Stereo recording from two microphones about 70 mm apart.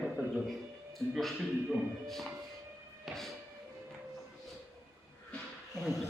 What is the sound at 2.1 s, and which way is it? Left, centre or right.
Music, centre.